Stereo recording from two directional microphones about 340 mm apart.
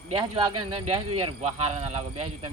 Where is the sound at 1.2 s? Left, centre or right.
Centre.